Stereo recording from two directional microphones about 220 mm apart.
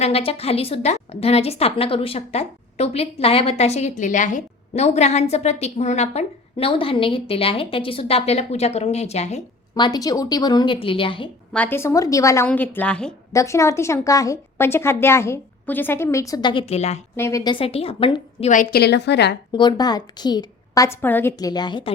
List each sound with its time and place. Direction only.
0.0 s a woman's voice: 25° left (ahead or behind)
11.5 s a woman's voice: 10° left (ahead or behind); by 17.0 s 30° left (ahead or behind)
17.2 s a woman's voice: 15° left (ahead or behind); by 19.4 s 50° left (ahead or behind)
19.5 s a woman's voice: 20° left (ahead or behind)